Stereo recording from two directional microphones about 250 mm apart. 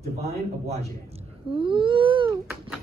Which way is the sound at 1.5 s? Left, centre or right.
Right.